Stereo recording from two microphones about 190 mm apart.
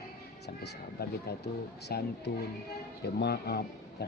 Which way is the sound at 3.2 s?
60° left (ahead or behind).